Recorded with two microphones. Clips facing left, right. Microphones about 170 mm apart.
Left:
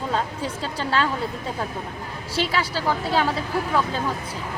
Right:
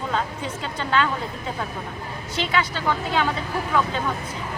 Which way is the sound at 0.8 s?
35° left (ahead or behind).